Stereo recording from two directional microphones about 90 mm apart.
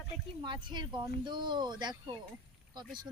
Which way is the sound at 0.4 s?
60° right (ahead or behind).